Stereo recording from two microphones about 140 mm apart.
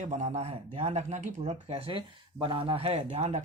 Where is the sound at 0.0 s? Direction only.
55° right (ahead or behind).